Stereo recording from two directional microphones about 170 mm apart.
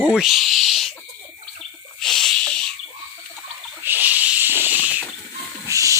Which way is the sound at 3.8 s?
10° right (ahead or behind).